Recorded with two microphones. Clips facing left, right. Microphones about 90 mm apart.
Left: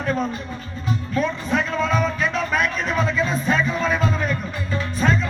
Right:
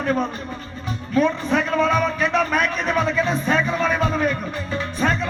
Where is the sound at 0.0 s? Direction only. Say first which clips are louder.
Right 2 dB; 50° right (ahead or behind).